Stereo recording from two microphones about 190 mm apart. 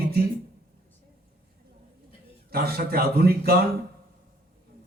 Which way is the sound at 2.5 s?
55° right (ahead or behind).